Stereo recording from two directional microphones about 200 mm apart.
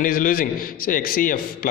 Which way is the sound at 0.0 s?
45° left (ahead or behind).